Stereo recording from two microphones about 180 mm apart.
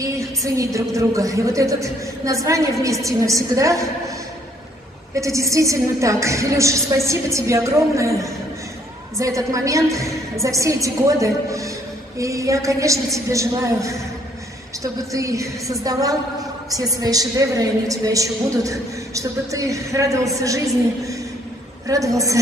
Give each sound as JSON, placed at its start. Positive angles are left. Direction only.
{"t": 0.0, "sound": "a woman's voice", "side_deg": -20}
{"t": 5.1, "sound": "a woman's voice", "side_deg": -15}
{"t": 15.1, "sound": "a woman's voice", "side_deg": -15}